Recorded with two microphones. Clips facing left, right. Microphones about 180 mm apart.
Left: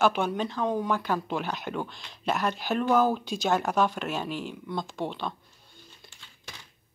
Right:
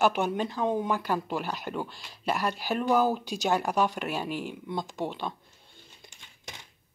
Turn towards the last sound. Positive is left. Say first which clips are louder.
# right 1 dB
turn(degrees=-20)  # may be behind; listen again after turning